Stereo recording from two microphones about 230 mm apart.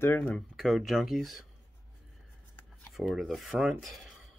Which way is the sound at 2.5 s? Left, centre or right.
Centre.